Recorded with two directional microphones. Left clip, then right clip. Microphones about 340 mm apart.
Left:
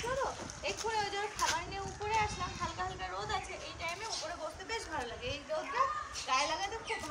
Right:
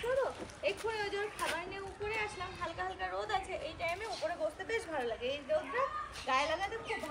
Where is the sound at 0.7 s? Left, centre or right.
Centre.